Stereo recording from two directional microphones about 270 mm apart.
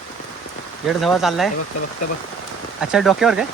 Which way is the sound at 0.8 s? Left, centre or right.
Centre.